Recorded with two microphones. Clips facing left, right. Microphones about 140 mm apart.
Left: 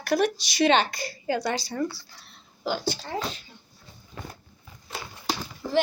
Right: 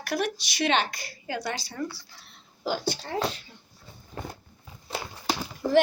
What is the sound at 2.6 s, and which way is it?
Speech, 40° right (ahead or behind).